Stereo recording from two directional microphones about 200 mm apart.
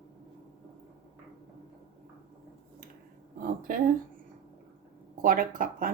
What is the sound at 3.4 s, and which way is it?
Speech, 45° right (ahead or behind).